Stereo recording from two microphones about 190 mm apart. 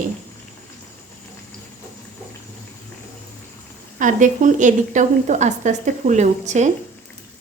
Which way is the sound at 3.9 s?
40° right (ahead or behind).